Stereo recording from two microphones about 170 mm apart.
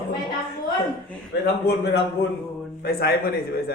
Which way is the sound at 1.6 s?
75° left (ahead or behind).